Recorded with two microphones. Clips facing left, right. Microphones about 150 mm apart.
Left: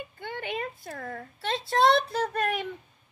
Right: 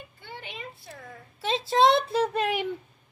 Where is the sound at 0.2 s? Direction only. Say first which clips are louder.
Left 8 dB; 55° left (ahead or behind).